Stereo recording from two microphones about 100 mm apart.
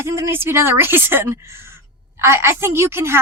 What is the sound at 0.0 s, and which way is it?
A woman's voice, 25° right (ahead or behind).